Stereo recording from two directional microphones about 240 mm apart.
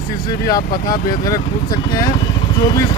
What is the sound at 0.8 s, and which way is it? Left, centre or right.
Speech, centre.